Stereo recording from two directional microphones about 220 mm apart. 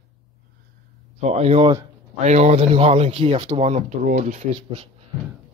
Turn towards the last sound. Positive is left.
turn(degrees=-35)  # may be behind; listen again after turning